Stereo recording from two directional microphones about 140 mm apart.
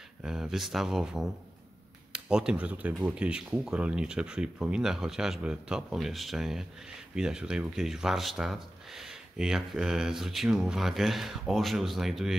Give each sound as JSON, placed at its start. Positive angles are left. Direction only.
{"t": 0.2, "sound": "speech", "side_deg": -5}